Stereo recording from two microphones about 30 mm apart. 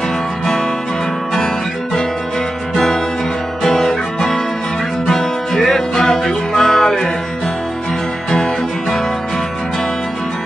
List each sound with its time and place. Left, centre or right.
3.6 s music: centre
5.9 s music: left